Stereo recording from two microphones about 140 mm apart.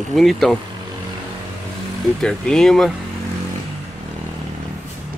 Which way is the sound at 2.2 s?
5° left (ahead or behind).